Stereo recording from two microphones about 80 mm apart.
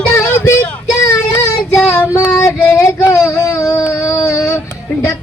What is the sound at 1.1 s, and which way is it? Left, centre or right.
Child singing, left.